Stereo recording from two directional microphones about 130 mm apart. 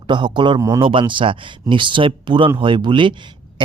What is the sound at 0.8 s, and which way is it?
Speech, 40° right (ahead or behind).